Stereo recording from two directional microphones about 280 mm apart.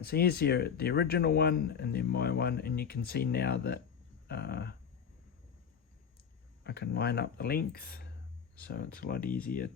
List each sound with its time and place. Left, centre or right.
0.0 s speech: left
6.7 s speech: left